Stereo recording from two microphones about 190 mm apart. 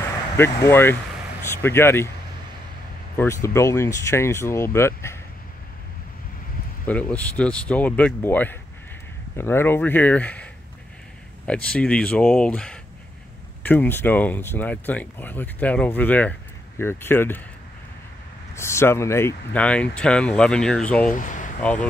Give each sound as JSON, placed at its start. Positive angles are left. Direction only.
{"t": 0.4, "sound": "speech", "side_deg": 15}
{"t": 3.2, "sound": "speech", "side_deg": 15}
{"t": 6.9, "sound": "speech", "side_deg": 5}
{"t": 18.5, "sound": "speech", "side_deg": 15}
{"t": 21.1, "sound": "speech", "side_deg": 40}